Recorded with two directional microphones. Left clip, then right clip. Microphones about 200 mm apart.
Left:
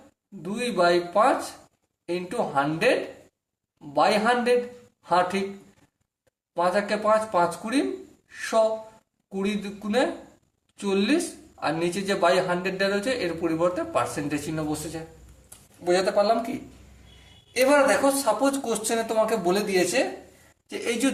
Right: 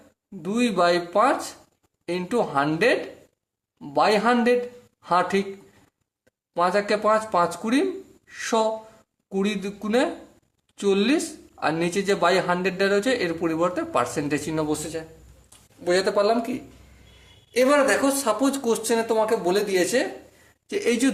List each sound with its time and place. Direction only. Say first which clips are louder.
0.4 s speech: right 2 dB; 45° right (ahead or behind)
6.5 s speech: right 2 dB; 45° right (ahead or behind)
15.8 s speech: right 1 dB; 35° right (ahead or behind)
17.5 s speech: right 1 dB; 35° right (ahead or behind)
20.7 s speech: right 4 dB; 40° right (ahead or behind)